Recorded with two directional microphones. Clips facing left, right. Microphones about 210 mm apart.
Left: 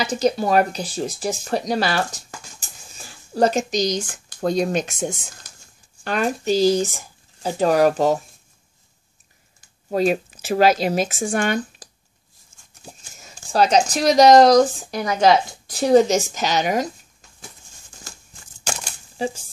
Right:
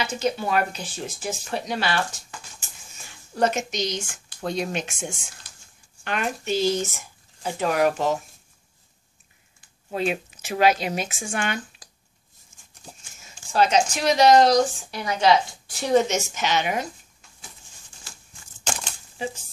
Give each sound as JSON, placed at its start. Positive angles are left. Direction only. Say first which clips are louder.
{"t": 0.0, "sound": "speech", "louder": "left 5 dB", "side_deg": 35}
{"t": 9.8, "sound": "speech", "louder": "left 6 dB", "side_deg": 40}
{"t": 13.0, "sound": "speech", "louder": "left 4 dB", "side_deg": 35}
{"t": 18.1, "sound": "a sound", "louder": "left 5 dB", "side_deg": 45}